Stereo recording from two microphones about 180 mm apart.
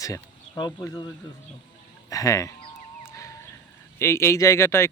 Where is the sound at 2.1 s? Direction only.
20° left (ahead or behind).